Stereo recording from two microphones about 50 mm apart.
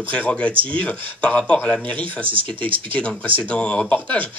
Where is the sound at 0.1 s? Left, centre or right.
Left.